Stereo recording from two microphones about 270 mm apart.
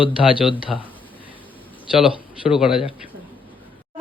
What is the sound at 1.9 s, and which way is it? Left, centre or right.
Speech, centre.